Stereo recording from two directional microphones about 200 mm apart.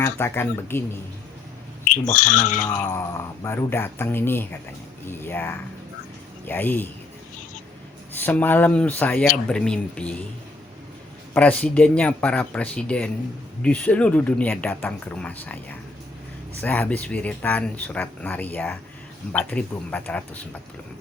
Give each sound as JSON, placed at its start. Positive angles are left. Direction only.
{"t": 0.0, "sound": "speech", "side_deg": 10}
{"t": 1.8, "sound": "speech", "side_deg": 40}
{"t": 3.4, "sound": "speech", "side_deg": 10}
{"t": 8.2, "sound": "speech", "side_deg": 10}
{"t": 11.3, "sound": "speech", "side_deg": 10}
{"t": 16.6, "sound": "speech", "side_deg": 10}